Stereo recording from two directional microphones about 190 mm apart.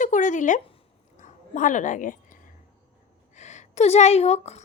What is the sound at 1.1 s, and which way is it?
Dog, 40° left (ahead or behind).